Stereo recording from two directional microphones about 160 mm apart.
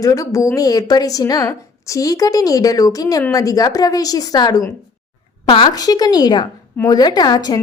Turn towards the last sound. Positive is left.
turn(degrees=25)  # may be behind; listen again after turning